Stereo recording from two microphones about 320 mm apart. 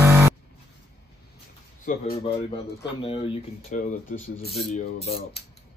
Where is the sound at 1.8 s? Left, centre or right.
Left.